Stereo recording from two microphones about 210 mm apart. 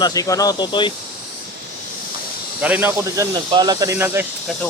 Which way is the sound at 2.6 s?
5° right (ahead or behind).